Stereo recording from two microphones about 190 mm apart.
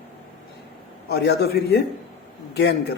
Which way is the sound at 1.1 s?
60° left (ahead or behind).